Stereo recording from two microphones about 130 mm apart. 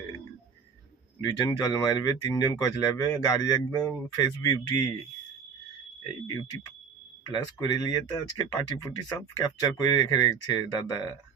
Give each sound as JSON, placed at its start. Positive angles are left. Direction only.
{"t": 1.2, "sound": "speech", "side_deg": 25}
{"t": 7.3, "sound": "speech", "side_deg": 35}